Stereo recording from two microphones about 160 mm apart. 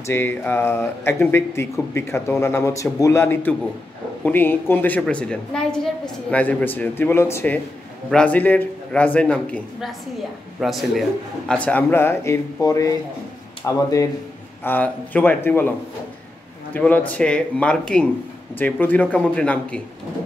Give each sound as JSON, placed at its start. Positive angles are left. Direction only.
{"t": 0.0, "sound": "a man's voice", "side_deg": 15}
{"t": 14.6, "sound": "speech", "side_deg": 10}
{"t": 16.7, "sound": "speech", "side_deg": 10}